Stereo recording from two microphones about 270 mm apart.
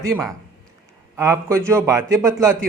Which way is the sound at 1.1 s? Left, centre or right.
Centre.